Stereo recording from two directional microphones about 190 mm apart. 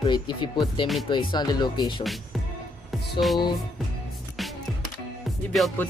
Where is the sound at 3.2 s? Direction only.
Centre (ahead or behind).